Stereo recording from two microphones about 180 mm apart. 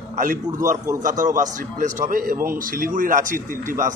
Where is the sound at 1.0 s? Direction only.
45° right (ahead or behind).